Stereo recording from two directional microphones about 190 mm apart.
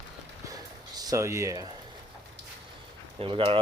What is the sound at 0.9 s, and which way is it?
Speech, 20° right (ahead or behind).